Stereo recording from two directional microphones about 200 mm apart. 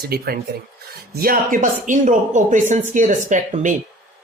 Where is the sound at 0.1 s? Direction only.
50° right (ahead or behind).